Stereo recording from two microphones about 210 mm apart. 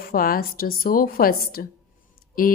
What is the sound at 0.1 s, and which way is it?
A woman's voice, 45° left (ahead or behind).